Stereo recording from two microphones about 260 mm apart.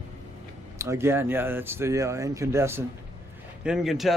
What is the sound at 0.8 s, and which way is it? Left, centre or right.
Speech, centre.